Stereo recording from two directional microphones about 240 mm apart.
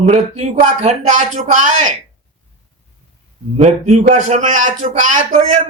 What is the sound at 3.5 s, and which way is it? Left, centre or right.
A man's voice, right.